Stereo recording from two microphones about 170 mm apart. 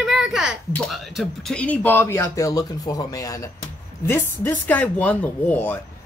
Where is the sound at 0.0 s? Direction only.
5° right (ahead or behind).